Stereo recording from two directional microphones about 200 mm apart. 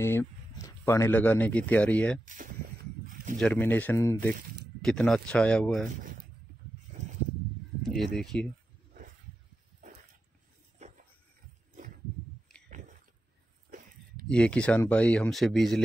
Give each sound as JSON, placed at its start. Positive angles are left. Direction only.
{"t": 0.0, "sound": "speech", "side_deg": 10}
{"t": 2.2, "sound": "speech", "side_deg": -40}
{"t": 3.3, "sound": "speech", "side_deg": 5}
{"t": 7.8, "sound": "speech", "side_deg": 0}
{"t": 10.8, "sound": "a sound", "side_deg": -35}
{"t": 13.7, "sound": "a sound", "side_deg": -40}
{"t": 14.2, "sound": "speech", "side_deg": 5}